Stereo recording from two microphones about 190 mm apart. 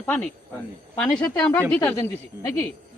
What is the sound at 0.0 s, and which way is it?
A woman's voice, 10° left (ahead or behind).